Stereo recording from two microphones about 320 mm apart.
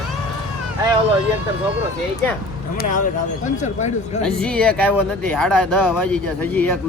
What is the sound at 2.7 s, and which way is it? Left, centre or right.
Speech, left.